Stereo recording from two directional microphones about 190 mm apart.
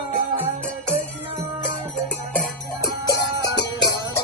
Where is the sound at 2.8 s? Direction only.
60° left (ahead or behind).